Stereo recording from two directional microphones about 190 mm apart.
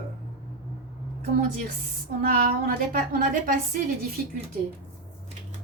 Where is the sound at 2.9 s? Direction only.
45° right (ahead or behind).